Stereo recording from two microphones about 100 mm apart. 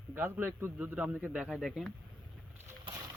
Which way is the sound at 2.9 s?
35° right (ahead or behind).